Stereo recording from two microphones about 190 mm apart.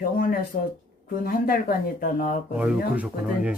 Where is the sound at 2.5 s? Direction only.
5° right (ahead or behind).